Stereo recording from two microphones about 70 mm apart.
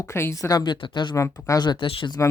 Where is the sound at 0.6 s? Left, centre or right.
Left.